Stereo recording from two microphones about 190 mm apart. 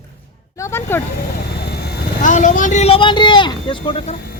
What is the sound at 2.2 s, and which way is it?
Speech, 40° left (ahead or behind).